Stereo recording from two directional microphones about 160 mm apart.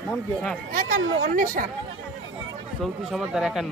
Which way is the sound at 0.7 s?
55° right (ahead or behind).